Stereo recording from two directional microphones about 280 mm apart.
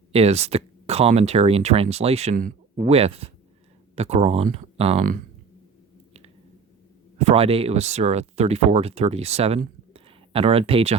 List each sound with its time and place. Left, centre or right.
0.1 s speech: right
7.2 s speech: right